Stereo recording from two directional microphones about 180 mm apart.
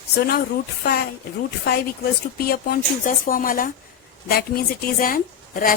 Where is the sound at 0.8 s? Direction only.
60° left (ahead or behind).